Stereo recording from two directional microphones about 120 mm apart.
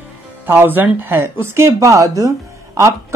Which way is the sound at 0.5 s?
15° right (ahead or behind).